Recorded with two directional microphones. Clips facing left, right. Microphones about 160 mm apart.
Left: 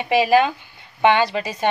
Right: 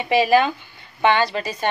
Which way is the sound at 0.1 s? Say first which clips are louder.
Even; 10° left (ahead or behind).